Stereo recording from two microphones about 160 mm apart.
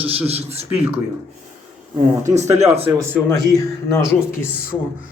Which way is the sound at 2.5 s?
40° right (ahead or behind).